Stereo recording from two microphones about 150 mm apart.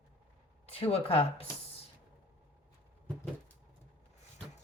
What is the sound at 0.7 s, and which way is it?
Speech, 40° left (ahead or behind).